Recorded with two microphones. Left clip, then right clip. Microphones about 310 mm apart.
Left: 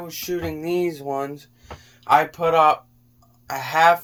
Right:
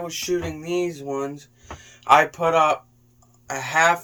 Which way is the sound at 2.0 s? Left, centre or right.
Centre.